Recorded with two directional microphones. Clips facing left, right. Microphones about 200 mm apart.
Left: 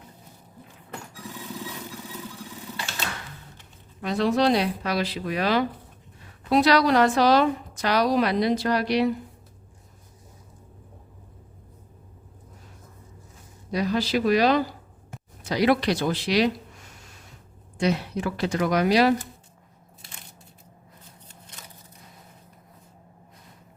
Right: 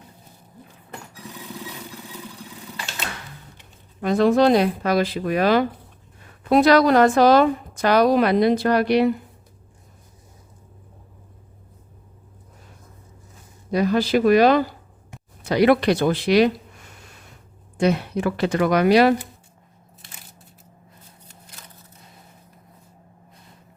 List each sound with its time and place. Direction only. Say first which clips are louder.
4.0 s a woman's voice: right 6 dB; 50° right (ahead or behind)
13.7 s a woman's voice: right 5 dB; 55° right (ahead or behind)
17.7 s speech: right 4 dB; 55° right (ahead or behind)